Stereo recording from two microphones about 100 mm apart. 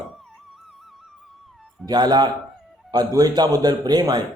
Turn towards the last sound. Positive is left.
turn(degrees=-40)  # may be behind; listen again after turning